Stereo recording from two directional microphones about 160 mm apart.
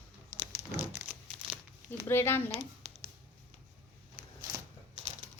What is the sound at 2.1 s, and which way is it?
Speech, 15° left (ahead or behind).